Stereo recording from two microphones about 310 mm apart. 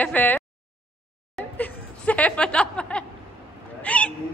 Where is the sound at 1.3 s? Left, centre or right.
Centre.